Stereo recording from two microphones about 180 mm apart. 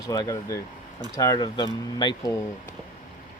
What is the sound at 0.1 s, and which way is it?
A man's voice, 20° left (ahead or behind).